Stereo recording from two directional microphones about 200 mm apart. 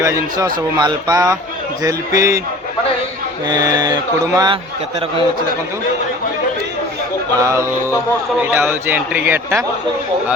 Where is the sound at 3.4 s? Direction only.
20° right (ahead or behind).